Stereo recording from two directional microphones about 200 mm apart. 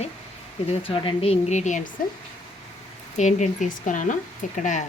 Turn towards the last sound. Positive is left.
turn(degrees=40)  # may be behind; listen again after turning